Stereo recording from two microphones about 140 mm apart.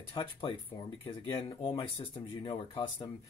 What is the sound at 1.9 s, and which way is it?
Speech, 35° left (ahead or behind).